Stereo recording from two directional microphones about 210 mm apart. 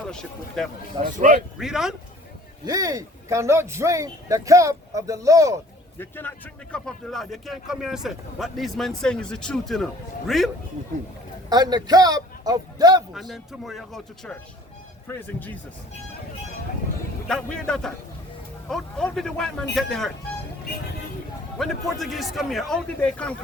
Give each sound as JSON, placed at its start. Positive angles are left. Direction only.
{"t": 0.1, "sound": "speech", "side_deg": 5}
{"t": 1.0, "sound": "speech", "side_deg": -40}
{"t": 1.5, "sound": "speech", "side_deg": 0}
{"t": 2.6, "sound": "speech", "side_deg": -15}
{"t": 6.0, "sound": "speech", "side_deg": 10}
{"t": 11.4, "sound": "a man's voice", "side_deg": -20}
{"t": 13.1, "sound": "speech", "side_deg": 0}
{"t": 17.2, "sound": "speech", "side_deg": 5}
{"t": 21.6, "sound": "speech", "side_deg": 0}